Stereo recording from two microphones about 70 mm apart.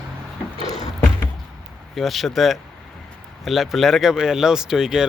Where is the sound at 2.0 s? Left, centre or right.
Centre.